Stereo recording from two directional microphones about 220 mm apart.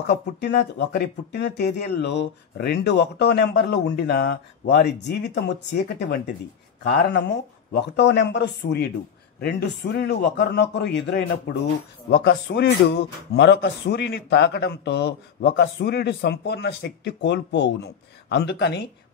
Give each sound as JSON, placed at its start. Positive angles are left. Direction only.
{"t": 0.0, "sound": "speech", "side_deg": 50}